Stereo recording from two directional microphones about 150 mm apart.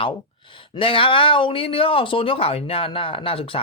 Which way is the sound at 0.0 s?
35° left (ahead or behind).